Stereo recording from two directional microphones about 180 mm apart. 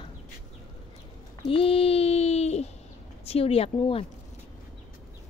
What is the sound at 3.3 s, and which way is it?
Speech, 35° left (ahead or behind).